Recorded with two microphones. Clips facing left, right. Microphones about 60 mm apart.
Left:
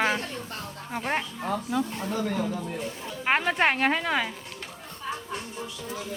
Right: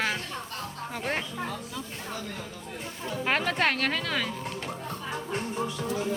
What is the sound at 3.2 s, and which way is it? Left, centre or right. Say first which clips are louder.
A woman's voice: left 3 dB; centre.